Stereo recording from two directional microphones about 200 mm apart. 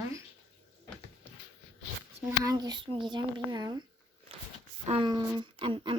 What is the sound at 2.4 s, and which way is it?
Speech, 20° right (ahead or behind).